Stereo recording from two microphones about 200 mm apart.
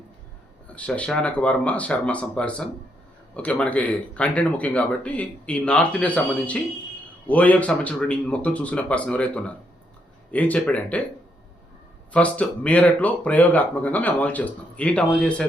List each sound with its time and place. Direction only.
0.8 s speech: 5° left (ahead or behind)
12.1 s speech: 5° left (ahead or behind)